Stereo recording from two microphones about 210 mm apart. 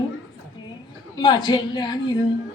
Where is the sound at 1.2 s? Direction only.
20° left (ahead or behind).